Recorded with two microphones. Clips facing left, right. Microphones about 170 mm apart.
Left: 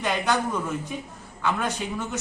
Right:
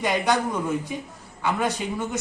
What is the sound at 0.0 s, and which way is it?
A man's voice, 15° right (ahead or behind).